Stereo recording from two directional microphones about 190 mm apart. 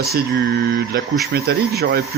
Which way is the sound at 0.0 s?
55° right (ahead or behind).